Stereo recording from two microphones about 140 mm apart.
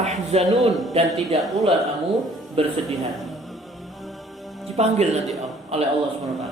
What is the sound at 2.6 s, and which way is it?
Speech, 45° right (ahead or behind).